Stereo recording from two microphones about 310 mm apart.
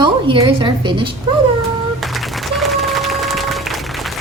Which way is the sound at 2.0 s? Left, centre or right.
Centre.